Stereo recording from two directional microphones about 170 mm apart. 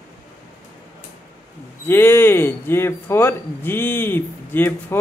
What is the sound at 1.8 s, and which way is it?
A man's voice, 15° left (ahead or behind).